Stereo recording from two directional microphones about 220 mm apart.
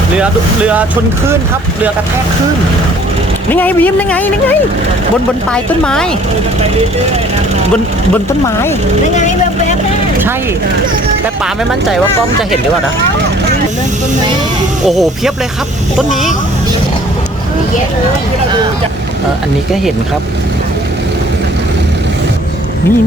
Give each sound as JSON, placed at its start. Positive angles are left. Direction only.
{"t": 3.5, "sound": "speech", "side_deg": 10}
{"t": 9.1, "sound": "speech", "side_deg": 35}
{"t": 14.8, "sound": "speech", "side_deg": 0}